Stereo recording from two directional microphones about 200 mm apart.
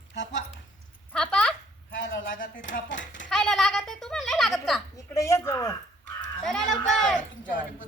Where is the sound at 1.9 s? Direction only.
70° left (ahead or behind).